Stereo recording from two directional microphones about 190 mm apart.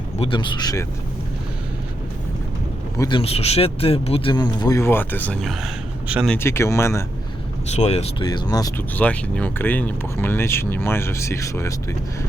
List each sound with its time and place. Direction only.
0.2 s speech: 25° left (ahead or behind)
3.0 s speech: 25° left (ahead or behind); by 6.2 s 5° right (ahead or behind)
6.2 s speech: 10° left (ahead or behind)
7.8 s speech: 35° left (ahead or behind)
8.2 s speech: 20° left (ahead or behind)
9.0 s speech: 5° left (ahead or behind)